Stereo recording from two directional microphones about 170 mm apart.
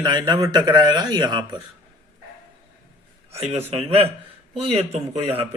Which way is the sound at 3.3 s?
35° right (ahead or behind).